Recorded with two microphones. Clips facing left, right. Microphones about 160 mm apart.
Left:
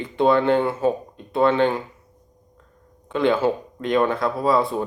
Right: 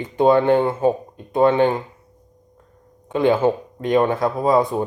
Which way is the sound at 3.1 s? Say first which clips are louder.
Right 3 dB; 15° right (ahead or behind).